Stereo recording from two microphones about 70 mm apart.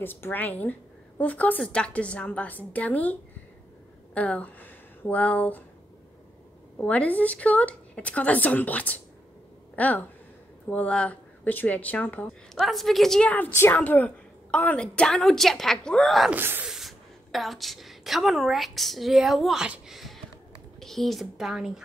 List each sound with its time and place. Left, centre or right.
0.0 s a woman's voice: left
6.8 s a woman's voice: left
12.5 s a woman's voice: centre
13.2 s a woman's voice: left; by 16.3 s centre
16.3 s speech: right
16.6 s a woman's voice: centre
19.9 s a sound: centre
20.8 s a woman's voice: centre